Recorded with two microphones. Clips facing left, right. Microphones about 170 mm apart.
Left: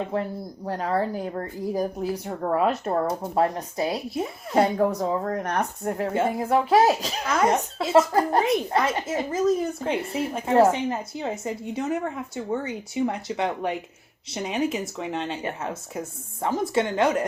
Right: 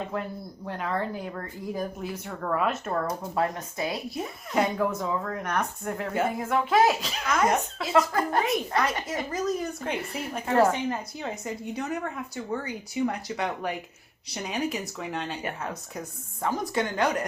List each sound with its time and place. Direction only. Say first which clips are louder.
0.1 s speech: left 5 dB; 35° left (ahead or behind)